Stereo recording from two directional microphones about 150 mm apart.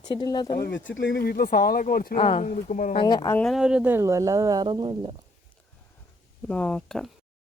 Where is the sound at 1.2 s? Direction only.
90° left.